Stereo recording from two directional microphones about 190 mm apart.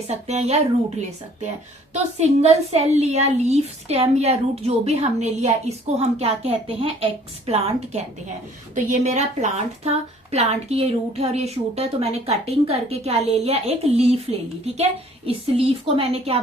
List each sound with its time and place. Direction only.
0.1 s a woman's voice: 35° right (ahead or behind)
1.9 s a woman's voice: 35° right (ahead or behind)